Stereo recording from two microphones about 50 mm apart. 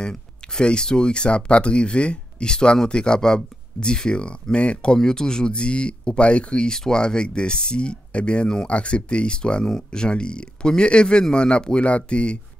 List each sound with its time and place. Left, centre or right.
0.0 s speech: centre